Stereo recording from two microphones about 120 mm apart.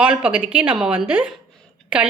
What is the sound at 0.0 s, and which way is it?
A woman's voice, 10° right (ahead or behind).